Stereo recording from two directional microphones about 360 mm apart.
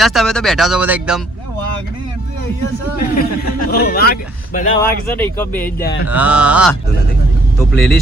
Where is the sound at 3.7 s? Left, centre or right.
Left.